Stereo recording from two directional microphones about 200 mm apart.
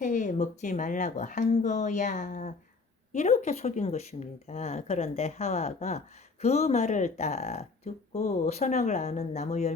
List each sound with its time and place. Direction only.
0.0 s speech: 40° left (ahead or behind)